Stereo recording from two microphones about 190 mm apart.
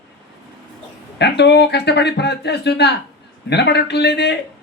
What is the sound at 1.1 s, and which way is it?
Speech, 60° left (ahead or behind).